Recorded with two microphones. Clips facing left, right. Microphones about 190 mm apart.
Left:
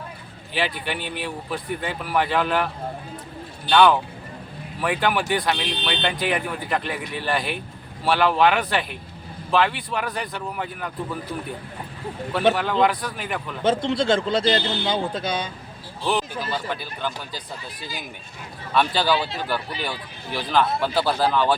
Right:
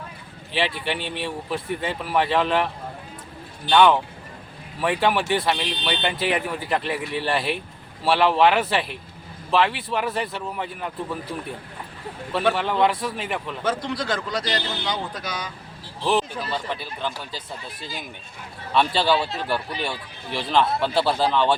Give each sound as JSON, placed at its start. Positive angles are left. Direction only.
{"t": 0.5, "sound": "speech", "side_deg": 0}
{"t": 4.8, "sound": "speech", "side_deg": 0}
{"t": 12.5, "sound": "speech", "side_deg": 0}
{"t": 13.7, "sound": "a man's voice", "side_deg": 25}
{"t": 16.0, "sound": "speech", "side_deg": 0}
{"t": 18.9, "sound": "speech", "side_deg": 0}